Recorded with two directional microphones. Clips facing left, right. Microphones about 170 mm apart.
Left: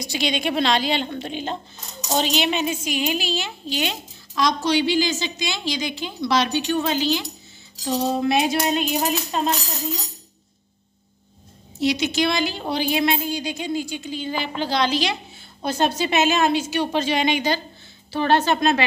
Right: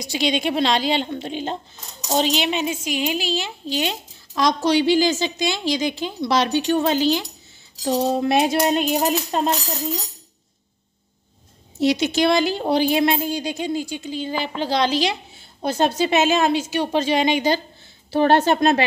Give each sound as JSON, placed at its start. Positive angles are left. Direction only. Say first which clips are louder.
{"t": 0.1, "sound": "a woman's voice", "louder": "right 3 dB", "side_deg": -30}
{"t": 4.4, "sound": "a woman's voice", "louder": "right 2 dB", "side_deg": -45}
{"t": 11.8, "sound": "a woman's voice", "louder": "right 3 dB", "side_deg": -45}
{"t": 18.1, "sound": "a woman's voice", "louder": "right 3 dB", "side_deg": -50}